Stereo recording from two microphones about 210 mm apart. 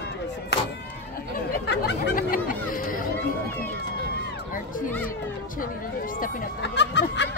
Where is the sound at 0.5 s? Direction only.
50° left (ahead or behind).